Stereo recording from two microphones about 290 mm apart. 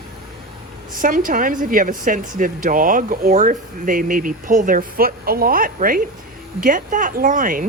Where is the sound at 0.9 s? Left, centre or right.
Right.